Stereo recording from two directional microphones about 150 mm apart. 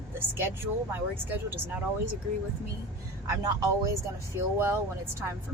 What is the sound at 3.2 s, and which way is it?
Speech, 20° right (ahead or behind).